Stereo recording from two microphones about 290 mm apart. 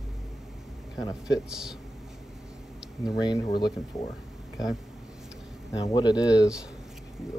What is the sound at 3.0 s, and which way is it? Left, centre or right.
Speech, centre.